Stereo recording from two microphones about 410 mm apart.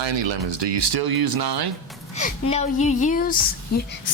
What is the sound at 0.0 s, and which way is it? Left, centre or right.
Speech, right.